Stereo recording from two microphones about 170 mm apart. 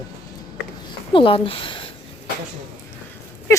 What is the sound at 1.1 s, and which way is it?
Speech, 30° left (ahead or behind).